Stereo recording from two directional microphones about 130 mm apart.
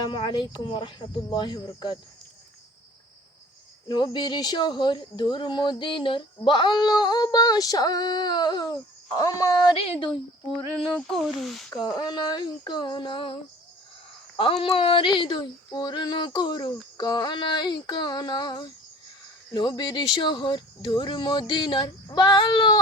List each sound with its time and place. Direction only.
0.0 s speech: 40° left (ahead or behind)
3.8 s speech: 35° left (ahead or behind)
9.7 s speech: 40° left (ahead or behind)
11.1 s speech: centre (ahead or behind)
11.8 s speech: 35° left (ahead or behind)